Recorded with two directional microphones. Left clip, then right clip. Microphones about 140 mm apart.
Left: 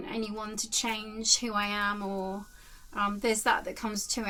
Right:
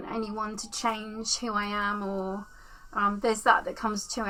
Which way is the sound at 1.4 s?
40° left (ahead or behind).